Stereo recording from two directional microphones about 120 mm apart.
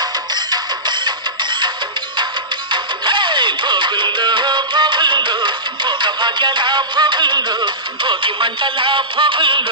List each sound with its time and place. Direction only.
0.0 s music: 35° right (ahead or behind)